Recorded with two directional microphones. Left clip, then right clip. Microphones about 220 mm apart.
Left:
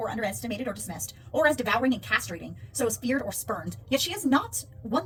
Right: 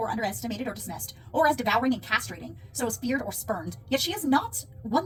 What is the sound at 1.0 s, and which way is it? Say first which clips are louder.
Speech: even; 15° left (ahead or behind).